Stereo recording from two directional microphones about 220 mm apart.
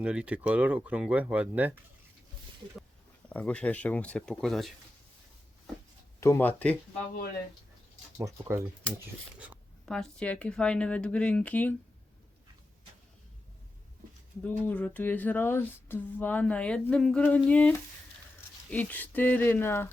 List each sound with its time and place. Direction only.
0.0 s speech: 5° right (ahead or behind)
3.2 s speech: 5° left (ahead or behind)
6.1 s speech: 15° left (ahead or behind)
8.2 s speech: 15° right (ahead or behind)
9.4 s speech: centre (ahead or behind)
14.4 s speech: 10° left (ahead or behind)